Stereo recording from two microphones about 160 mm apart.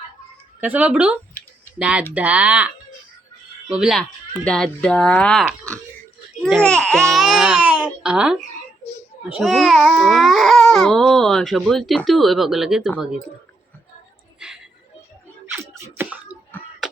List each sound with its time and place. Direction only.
0.6 s speech: 10° right (ahead or behind)
7.1 s babbling: centre (ahead or behind)
8.0 s speech: 5° right (ahead or behind)
14.3 s music: 5° right (ahead or behind)
15.5 s a sound: 15° right (ahead or behind)
16.8 s beatboxing: centre (ahead or behind)